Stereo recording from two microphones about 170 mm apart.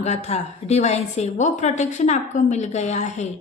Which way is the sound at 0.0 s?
40° left (ahead or behind).